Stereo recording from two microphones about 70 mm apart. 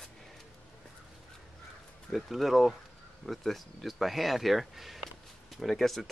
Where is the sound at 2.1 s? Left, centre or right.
Centre.